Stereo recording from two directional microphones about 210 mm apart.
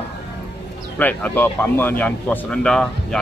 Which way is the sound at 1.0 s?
10° left (ahead or behind).